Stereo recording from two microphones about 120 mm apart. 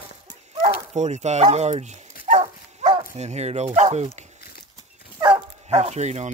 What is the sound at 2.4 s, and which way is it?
Dog, 70° right (ahead or behind).